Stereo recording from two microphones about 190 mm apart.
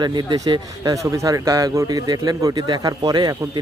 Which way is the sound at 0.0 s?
25° right (ahead or behind).